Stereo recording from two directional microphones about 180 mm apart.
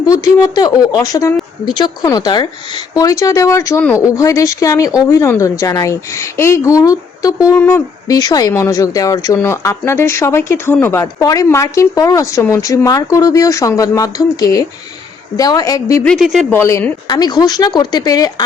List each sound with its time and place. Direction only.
0.0 s speech: 20° left (ahead or behind)
3.8 s speech: 5° left (ahead or behind)
4.0 s speech: 20° left (ahead or behind)
16.0 s speech: centre (ahead or behind)
16.5 s speech: 15° left (ahead or behind)